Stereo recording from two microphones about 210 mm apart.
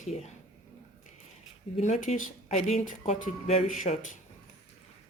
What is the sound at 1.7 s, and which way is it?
Speech, 35° left (ahead or behind).